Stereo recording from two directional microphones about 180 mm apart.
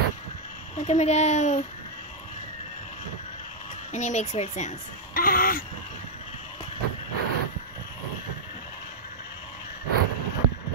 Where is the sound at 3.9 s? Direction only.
40° left (ahead or behind).